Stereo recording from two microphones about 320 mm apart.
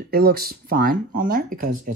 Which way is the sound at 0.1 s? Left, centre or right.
Right.